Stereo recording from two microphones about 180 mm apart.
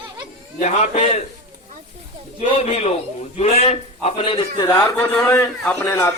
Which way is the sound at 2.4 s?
40° left (ahead or behind).